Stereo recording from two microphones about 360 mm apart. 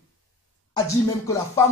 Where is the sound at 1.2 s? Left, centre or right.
Centre.